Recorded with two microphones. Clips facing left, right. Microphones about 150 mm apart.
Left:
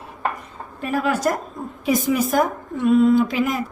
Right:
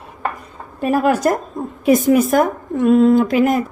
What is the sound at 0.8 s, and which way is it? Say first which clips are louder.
A woman's voice: right 6 dB; 45° right (ahead or behind).